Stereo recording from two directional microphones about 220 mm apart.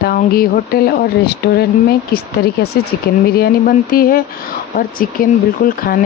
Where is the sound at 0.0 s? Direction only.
45° left (ahead or behind).